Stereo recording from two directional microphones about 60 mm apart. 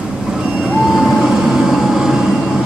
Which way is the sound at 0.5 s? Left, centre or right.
Right.